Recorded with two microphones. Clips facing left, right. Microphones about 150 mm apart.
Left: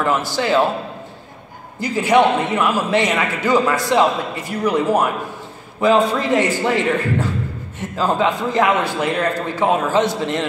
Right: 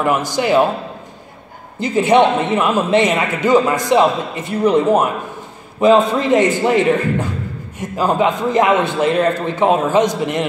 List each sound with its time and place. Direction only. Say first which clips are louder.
0.0 s a man's voice: right 2 dB; 15° right (ahead or behind)
1.8 s a man's voice: right 2 dB; 20° right (ahead or behind)